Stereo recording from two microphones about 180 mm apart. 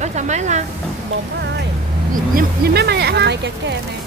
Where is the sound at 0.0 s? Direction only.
40° right (ahead or behind).